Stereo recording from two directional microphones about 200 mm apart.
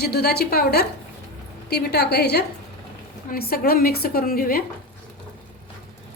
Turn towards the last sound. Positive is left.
turn(degrees=50)  # may be behind; listen again after turning